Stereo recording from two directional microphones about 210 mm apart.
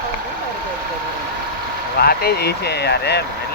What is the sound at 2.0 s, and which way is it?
Speech, 45° left (ahead or behind).